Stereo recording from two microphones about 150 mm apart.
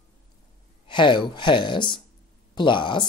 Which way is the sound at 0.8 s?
30° left (ahead or behind).